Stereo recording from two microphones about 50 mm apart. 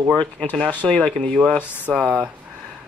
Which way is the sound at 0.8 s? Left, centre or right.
Left.